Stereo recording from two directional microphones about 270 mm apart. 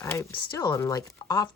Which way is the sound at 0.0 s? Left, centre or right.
Centre.